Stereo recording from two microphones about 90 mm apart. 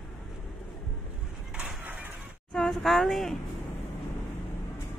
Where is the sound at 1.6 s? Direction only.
20° right (ahead or behind).